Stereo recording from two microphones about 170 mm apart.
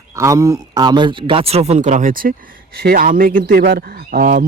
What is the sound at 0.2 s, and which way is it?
Speech, 15° right (ahead or behind).